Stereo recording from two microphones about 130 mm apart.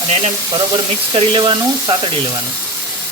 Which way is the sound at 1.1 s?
40° right (ahead or behind).